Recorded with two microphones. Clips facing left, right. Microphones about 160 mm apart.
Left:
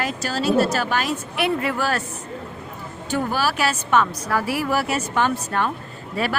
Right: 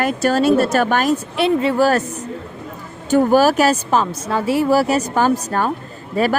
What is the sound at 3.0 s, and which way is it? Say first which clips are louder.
A woman's voice: right 10 dB; 45° right (ahead or behind).